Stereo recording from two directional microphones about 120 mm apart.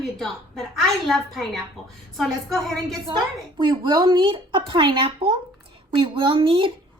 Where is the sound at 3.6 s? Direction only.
40° right (ahead or behind).